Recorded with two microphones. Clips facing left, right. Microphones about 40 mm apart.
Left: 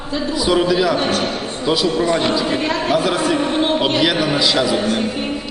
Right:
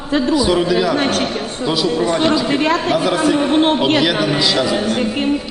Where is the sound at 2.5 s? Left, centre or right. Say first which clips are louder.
Right 3 dB; right.